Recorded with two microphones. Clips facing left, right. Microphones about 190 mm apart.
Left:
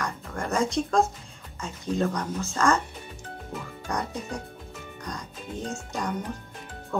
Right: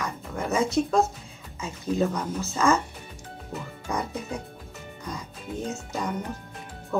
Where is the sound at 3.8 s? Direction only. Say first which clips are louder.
Right 1 dB; 5° right (ahead or behind).